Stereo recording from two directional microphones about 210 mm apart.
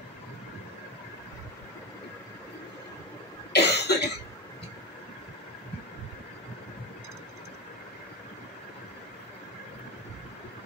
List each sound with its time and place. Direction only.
3.5 s cough: 55° left (ahead or behind)